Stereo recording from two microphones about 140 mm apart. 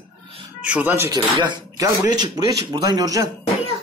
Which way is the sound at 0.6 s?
10° right (ahead or behind).